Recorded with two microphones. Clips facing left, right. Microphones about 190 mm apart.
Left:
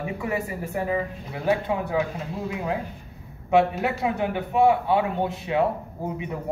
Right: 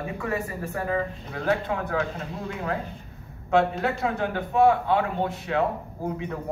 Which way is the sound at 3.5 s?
15° left (ahead or behind).